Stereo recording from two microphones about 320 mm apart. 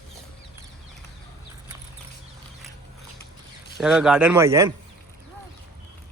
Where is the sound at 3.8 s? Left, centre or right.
Centre.